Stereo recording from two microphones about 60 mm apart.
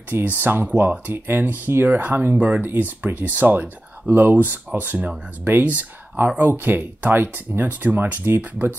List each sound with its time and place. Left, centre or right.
0.1 s speech: right